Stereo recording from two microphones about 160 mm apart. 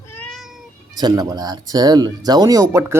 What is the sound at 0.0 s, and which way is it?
Cat, 15° left (ahead or behind).